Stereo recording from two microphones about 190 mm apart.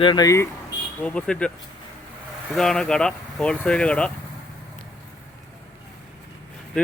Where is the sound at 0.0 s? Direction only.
25° left (ahead or behind).